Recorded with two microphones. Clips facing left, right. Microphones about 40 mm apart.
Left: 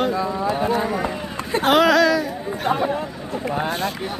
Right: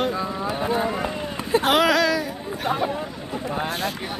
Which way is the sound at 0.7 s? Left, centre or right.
Right.